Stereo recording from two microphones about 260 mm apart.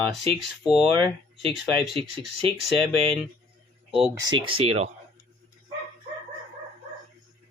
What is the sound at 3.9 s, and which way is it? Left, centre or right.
Speech, centre.